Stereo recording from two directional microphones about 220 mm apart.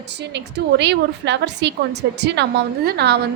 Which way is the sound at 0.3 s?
50° right (ahead or behind).